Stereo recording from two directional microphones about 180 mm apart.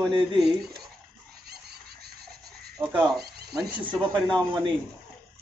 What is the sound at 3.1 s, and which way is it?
Speech, 60° right (ahead or behind).